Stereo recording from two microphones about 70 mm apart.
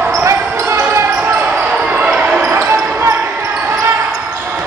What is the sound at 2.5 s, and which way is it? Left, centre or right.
Basketball bounce, right.